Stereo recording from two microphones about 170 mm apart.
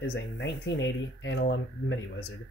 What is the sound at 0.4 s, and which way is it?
Speech, 90° left.